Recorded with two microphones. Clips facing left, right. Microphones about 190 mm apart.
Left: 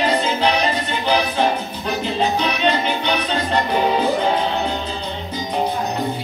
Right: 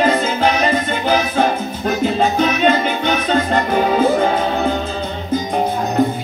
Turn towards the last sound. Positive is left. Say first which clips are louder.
# right 3 dB
turn(degrees=-50)  # may be behind; listen again after turning